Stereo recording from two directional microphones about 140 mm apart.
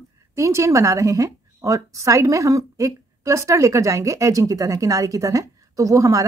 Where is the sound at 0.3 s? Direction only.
20° right (ahead or behind).